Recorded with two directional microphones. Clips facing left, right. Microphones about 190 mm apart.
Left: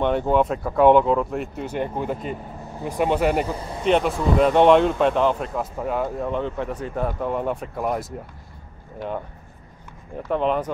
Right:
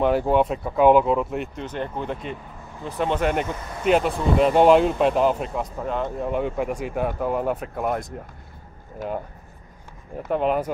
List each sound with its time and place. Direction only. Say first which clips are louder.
0.0 s speech: even; 5° right (ahead or behind)
3.4 s speech: left 2 dB; 30° left (ahead or behind)
3.8 s speech: even; centre (ahead or behind)
5.8 s speech: left 2 dB; 5° left (ahead or behind)
6.2 s speech: right 1 dB; 10° right (ahead or behind)
10.2 s speech: even; 5° right (ahead or behind)